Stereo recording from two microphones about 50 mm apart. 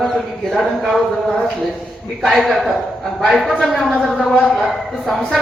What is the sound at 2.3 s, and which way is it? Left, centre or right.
Speech, centre.